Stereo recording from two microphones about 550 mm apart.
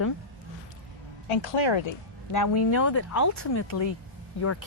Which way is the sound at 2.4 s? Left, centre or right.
Left.